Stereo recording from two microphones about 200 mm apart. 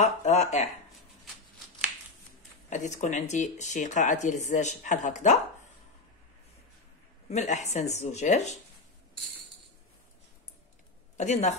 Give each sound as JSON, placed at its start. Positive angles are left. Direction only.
{"t": 0.0, "sound": "speech", "side_deg": 35}
{"t": 2.7, "sound": "speech", "side_deg": 35}
{"t": 7.2, "sound": "speech", "side_deg": 35}
{"t": 11.1, "sound": "speech", "side_deg": 35}